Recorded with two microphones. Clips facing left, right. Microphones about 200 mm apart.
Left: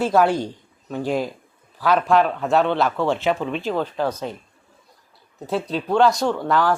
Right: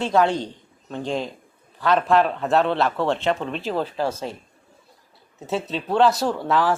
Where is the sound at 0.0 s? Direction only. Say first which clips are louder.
Left 2 dB; 5° left (ahead or behind).